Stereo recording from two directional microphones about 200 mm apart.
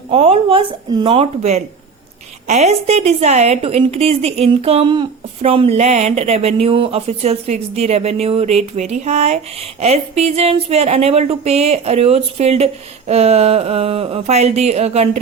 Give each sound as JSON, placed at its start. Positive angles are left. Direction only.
{"t": 0.1, "sound": "a woman's voice", "side_deg": -30}